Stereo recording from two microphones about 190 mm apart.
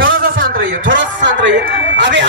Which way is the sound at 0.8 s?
75° right (ahead or behind).